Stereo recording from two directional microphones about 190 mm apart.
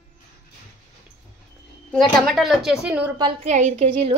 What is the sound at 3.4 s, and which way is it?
Speech, 35° right (ahead or behind).